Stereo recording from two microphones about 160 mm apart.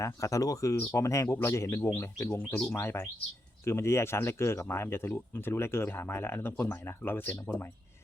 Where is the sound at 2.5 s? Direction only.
5° left (ahead or behind).